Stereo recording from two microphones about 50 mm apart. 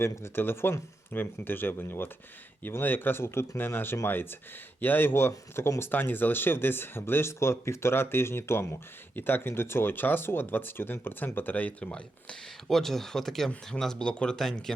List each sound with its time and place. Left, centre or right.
0.0 s speech: left
1.1 s speech: left
5.9 s speech: left
9.1 s speech: left
11.3 s speech: left
11.9 s speech: centre
12.6 s speech: centre